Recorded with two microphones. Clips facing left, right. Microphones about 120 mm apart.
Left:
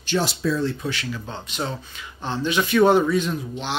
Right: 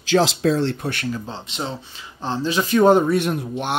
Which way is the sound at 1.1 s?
30° right (ahead or behind).